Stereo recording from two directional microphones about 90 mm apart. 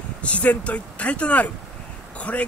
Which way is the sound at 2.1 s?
15° left (ahead or behind).